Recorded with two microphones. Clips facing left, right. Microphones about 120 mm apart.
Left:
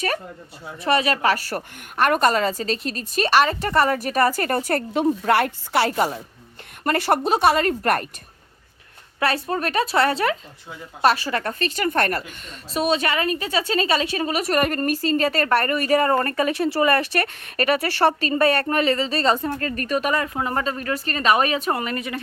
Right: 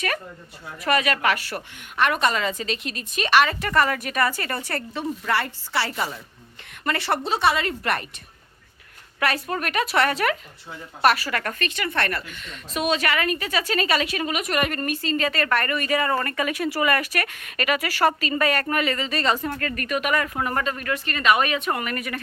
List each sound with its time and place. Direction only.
0.9 s a woman's voice: 30° left (ahead or behind)
9.2 s a woman's voice: 30° left (ahead or behind)